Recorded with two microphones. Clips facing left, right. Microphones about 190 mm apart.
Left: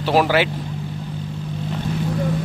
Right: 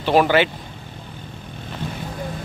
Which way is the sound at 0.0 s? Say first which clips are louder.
Right 1 dB; 5° left (ahead or behind).